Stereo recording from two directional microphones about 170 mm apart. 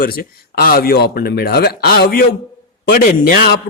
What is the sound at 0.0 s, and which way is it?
A man's voice, 60° left (ahead or behind).